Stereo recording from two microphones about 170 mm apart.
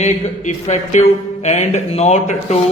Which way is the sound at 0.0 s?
40° left (ahead or behind).